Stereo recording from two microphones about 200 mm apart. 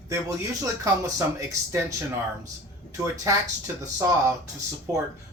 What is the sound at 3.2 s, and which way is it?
Speech, 15° right (ahead or behind).